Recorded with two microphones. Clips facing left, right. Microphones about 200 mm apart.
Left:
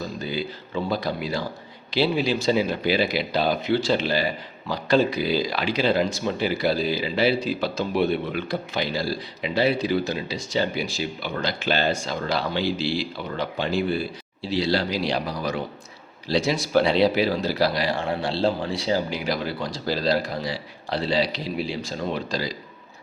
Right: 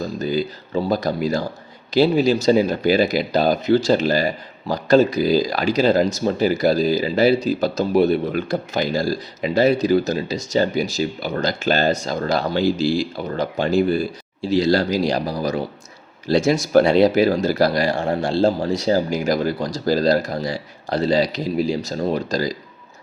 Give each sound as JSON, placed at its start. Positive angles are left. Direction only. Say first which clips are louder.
{"t": 0.0, "sound": "speech", "louder": "right 7 dB", "side_deg": -45}
{"t": 16.2, "sound": "speech", "louder": "right 6 dB", "side_deg": -50}